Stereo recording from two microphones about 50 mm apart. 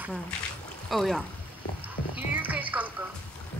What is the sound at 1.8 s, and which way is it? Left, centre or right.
Music, right.